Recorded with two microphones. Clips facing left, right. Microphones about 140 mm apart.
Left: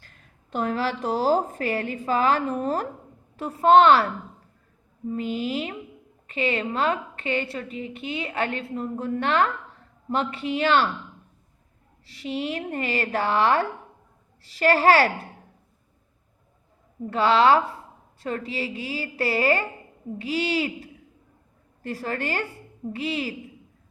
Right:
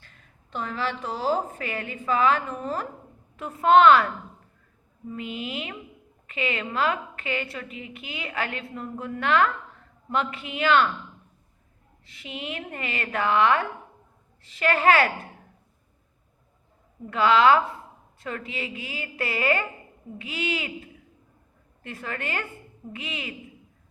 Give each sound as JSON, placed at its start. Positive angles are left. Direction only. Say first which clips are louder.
{"t": 0.5, "sound": "a woman's voice", "louder": "left 4 dB", "side_deg": 45}
{"t": 12.0, "sound": "a woman's voice", "louder": "left 7 dB", "side_deg": 35}
{"t": 17.1, "sound": "a woman's voice", "louder": "even", "side_deg": 30}